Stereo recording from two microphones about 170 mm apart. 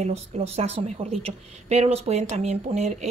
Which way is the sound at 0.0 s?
40° right (ahead or behind).